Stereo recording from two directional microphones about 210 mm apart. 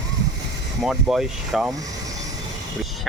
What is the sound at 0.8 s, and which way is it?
Speech, centre (ahead or behind).